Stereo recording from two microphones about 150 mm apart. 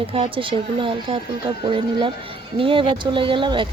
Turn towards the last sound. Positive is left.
turn(degrees=-30)  # may be behind; listen again after turning